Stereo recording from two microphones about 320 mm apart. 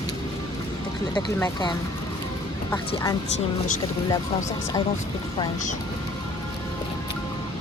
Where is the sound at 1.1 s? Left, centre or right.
Centre.